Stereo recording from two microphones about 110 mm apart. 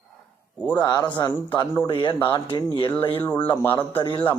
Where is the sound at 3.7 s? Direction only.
50° left (ahead or behind).